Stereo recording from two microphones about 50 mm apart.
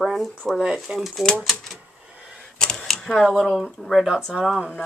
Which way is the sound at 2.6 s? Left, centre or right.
Centre.